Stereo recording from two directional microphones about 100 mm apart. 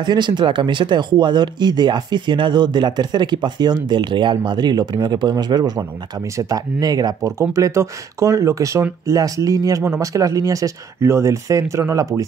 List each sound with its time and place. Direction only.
0.0 s speech: 50° right (ahead or behind); by 12.3 s 35° right (ahead or behind)